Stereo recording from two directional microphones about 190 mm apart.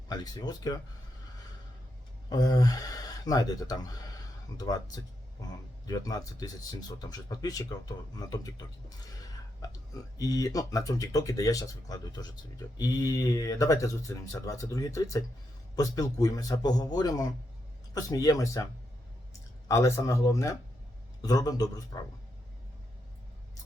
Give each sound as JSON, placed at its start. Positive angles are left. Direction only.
{"t": 0.1, "sound": "speech", "side_deg": 20}
{"t": 2.3, "sound": "speech", "side_deg": 20}